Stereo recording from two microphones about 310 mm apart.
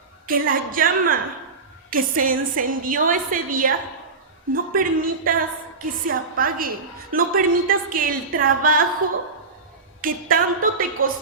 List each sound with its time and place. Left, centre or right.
0.3 s a woman's voice: right
10.0 s a woman's voice: right